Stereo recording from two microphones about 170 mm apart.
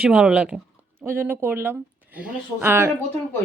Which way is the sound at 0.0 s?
5° right (ahead or behind).